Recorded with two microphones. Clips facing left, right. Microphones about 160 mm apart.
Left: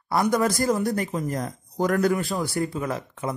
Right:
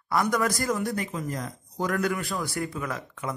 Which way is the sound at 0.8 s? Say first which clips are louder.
Left 4 dB; 40° left (ahead or behind).